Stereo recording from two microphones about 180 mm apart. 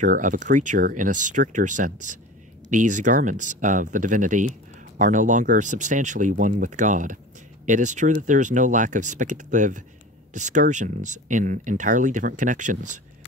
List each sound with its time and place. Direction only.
0.0 s speech: 45° right (ahead or behind)